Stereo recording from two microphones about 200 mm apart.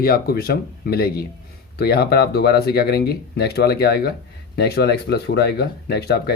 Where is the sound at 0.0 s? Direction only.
50° left (ahead or behind).